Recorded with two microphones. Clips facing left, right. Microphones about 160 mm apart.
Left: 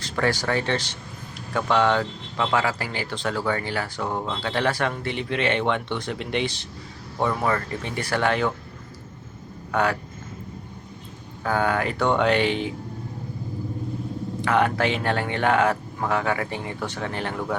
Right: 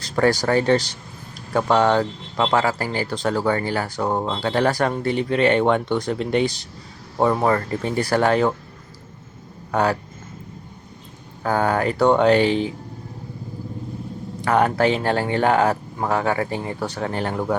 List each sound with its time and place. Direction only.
0.0 s speech: 40° right (ahead or behind)
9.7 s speech: 35° right (ahead or behind)
11.4 s speech: 35° right (ahead or behind)
14.4 s speech: 40° right (ahead or behind)